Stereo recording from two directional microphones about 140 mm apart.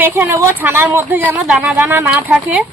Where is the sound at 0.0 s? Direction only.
15° right (ahead or behind).